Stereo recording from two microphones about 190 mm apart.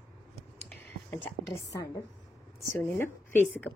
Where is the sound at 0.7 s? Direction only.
5° left (ahead or behind).